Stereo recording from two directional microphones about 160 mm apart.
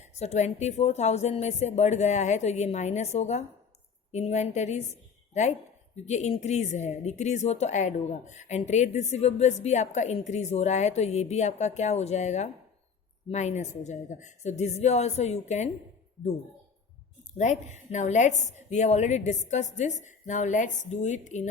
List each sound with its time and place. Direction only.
0.2 s a woman's voice: 45° left (ahead or behind)
17.3 s a woman's voice: 50° left (ahead or behind)